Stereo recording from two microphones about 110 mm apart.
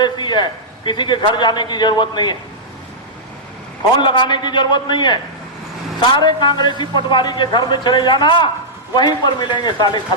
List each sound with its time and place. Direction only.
0.0 s a man's voice: 45° left (ahead or behind)
4.0 s a man's voice: 45° left (ahead or behind)